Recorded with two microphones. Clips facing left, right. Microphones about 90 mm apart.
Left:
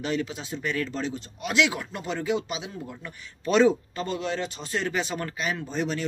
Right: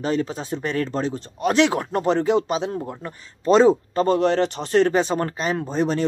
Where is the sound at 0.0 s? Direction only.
40° right (ahead or behind).